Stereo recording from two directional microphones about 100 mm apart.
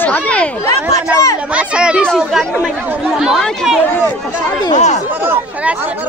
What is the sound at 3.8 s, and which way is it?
Speech, 20° left (ahead or behind).